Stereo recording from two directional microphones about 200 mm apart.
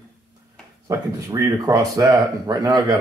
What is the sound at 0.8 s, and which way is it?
Speech, 15° right (ahead or behind).